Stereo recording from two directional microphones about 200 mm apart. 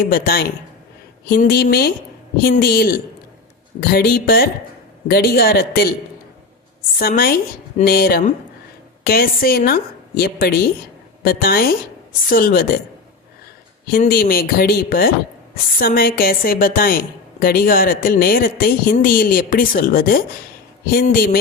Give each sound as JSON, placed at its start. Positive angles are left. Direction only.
{"t": 0.0, "sound": "speech", "side_deg": 45}
{"t": 7.0, "sound": "speech", "side_deg": 50}
{"t": 13.9, "sound": "speech", "side_deg": 50}